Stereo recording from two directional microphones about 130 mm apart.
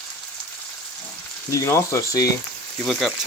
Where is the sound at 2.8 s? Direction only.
5° left (ahead or behind).